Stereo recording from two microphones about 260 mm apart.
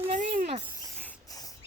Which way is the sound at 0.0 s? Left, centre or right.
Right.